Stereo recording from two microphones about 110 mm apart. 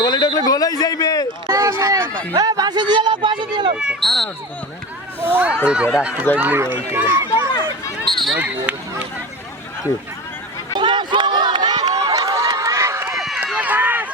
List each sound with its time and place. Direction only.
0.0 s a sound: 40° left (ahead or behind)
1.5 s a sound: 30° right (ahead or behind)
2.3 s speech: 35° right (ahead or behind)
3.8 s speech: centre (ahead or behind)
5.2 s speech: 15° right (ahead or behind)
7.3 s a sound: 35° left (ahead or behind)
8.1 s speech: 5° left (ahead or behind)
8.4 s speech: 10° right (ahead or behind)
10.8 s speech: 45° right (ahead or behind)
11.9 s run: 35° right (ahead or behind)
13.1 s run: centre (ahead or behind)
13.6 s run: 15° right (ahead or behind)